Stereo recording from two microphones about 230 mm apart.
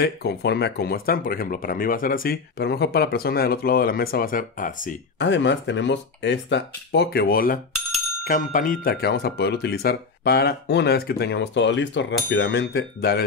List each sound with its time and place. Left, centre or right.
0.0 s speech: left
5.2 s speech: left